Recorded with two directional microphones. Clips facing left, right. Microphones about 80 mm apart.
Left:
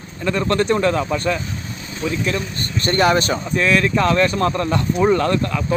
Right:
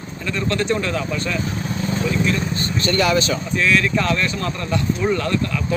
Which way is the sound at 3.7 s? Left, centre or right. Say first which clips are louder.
Left 2 dB; left.